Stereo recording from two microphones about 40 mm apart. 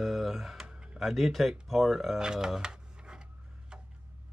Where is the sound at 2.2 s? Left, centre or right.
Centre.